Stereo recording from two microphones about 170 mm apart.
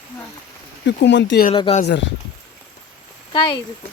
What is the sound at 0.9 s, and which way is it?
Speech, 90° left.